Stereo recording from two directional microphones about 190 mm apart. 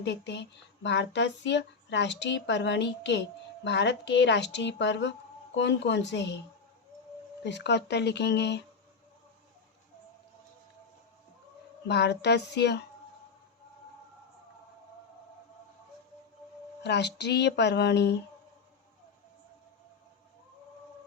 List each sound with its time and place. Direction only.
0.0 s speech: 65° left (ahead or behind)
7.4 s speech: 65° left (ahead or behind)
11.9 s speech: 60° left (ahead or behind)
16.8 s speech: 65° left (ahead or behind)